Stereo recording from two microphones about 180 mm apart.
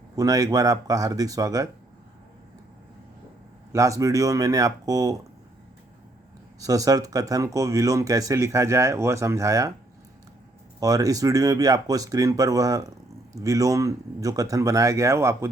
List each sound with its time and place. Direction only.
0.2 s speech: 20° right (ahead or behind)
3.7 s speech: 15° right (ahead or behind)
6.6 s speech: 20° right (ahead or behind)
10.8 s speech: 20° right (ahead or behind)